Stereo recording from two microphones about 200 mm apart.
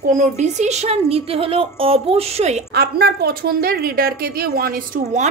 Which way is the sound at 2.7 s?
50° right (ahead or behind).